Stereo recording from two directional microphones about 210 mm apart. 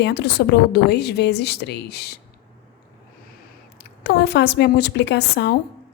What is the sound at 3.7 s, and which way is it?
A woman's voice, 55° left (ahead or behind).